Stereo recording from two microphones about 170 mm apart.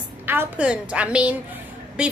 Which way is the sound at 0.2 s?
10° right (ahead or behind).